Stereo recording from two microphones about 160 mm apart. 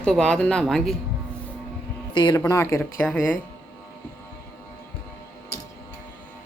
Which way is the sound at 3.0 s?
5° left (ahead or behind).